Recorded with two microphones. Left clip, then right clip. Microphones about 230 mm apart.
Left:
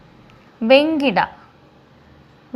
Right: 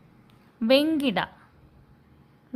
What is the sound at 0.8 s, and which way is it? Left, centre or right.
Speech, right.